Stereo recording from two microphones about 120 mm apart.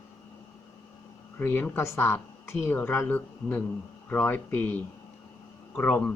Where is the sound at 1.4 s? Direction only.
15° left (ahead or behind).